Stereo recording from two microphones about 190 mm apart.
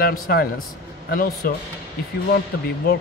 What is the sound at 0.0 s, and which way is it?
Speech, 55° left (ahead or behind).